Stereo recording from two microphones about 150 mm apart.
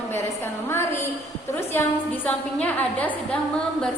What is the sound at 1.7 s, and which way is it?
A woman's voice, 15° left (ahead or behind).